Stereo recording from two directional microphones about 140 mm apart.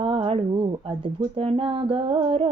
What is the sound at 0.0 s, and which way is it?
Female singing, 40° right (ahead or behind).